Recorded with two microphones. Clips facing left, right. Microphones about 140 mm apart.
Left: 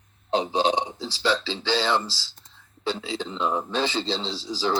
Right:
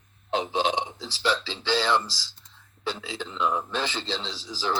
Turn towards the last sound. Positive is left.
turn(degrees=30)  # may be behind; listen again after turning